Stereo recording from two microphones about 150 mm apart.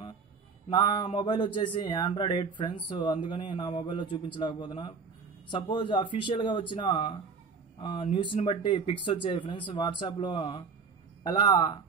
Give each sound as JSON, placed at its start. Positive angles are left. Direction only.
{"t": 0.7, "sound": "speech", "side_deg": 30}